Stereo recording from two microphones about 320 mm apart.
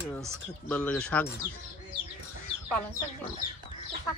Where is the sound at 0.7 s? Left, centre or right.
Centre.